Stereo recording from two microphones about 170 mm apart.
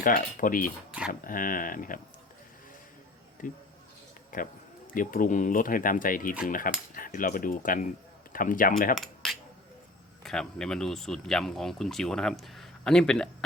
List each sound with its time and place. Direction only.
0.0 s cutlery: 55° left (ahead or behind)
1.2 s speech: 55° left (ahead or behind)
3.4 s speech: 50° left (ahead or behind)
6.5 s cutlery: 55° left (ahead or behind)
8.3 s speech: 55° left (ahead or behind)
9.0 s cutlery: centre (ahead or behind)
10.2 s speech: 5° left (ahead or behind)